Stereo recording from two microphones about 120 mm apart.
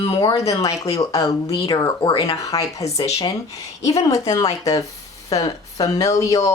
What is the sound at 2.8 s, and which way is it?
Speech, 65° left (ahead or behind).